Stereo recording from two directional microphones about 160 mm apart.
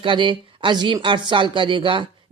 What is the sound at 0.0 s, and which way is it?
Speech, 30° right (ahead or behind).